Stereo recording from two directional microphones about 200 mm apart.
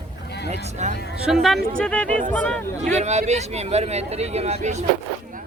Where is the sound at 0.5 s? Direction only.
35° right (ahead or behind).